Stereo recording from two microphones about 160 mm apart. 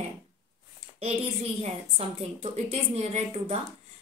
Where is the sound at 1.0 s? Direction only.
40° right (ahead or behind).